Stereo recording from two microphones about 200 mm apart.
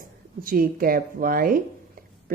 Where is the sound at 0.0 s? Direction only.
45° right (ahead or behind).